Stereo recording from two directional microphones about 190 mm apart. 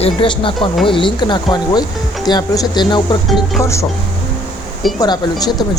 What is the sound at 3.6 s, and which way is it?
Speech, 15° left (ahead or behind).